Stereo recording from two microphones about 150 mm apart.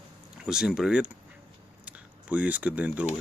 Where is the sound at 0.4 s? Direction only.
5° right (ahead or behind).